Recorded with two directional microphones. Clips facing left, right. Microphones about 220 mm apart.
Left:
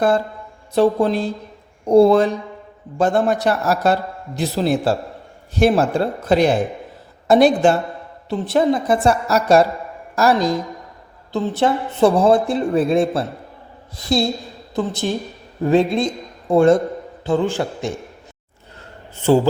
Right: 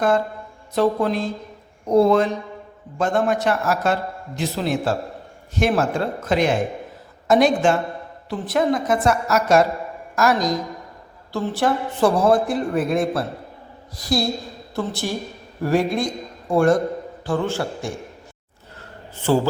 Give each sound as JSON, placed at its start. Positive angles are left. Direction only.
{"t": 0.8, "sound": "a woman's voice", "side_deg": 30}